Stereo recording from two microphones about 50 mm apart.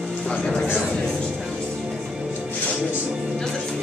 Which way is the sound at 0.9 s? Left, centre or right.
Centre.